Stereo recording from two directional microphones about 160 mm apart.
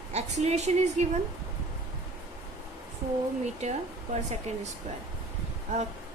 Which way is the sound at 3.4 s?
45° right (ahead or behind).